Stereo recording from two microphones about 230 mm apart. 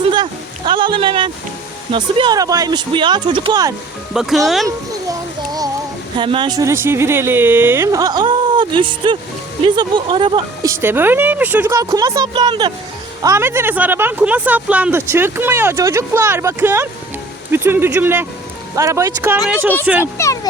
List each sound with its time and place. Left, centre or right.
0.1 s a sound: centre
1.9 s speech: right
4.1 s speech: centre
5.5 s speech: centre
20.1 s speech: centre